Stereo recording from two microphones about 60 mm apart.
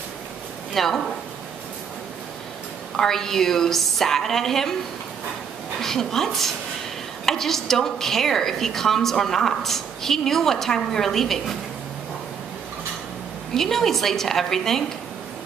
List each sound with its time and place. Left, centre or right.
0.7 s a woman's voice: centre
3.0 s a woman's voice: centre
5.8 s a woman's voice: centre
13.6 s a woman's voice: centre